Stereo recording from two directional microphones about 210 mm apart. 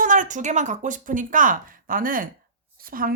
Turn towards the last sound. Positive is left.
turn(degrees=-45)  # may be behind; listen again after turning